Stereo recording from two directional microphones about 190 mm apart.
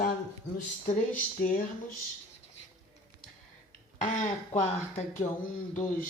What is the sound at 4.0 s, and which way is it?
Speech, 40° left (ahead or behind).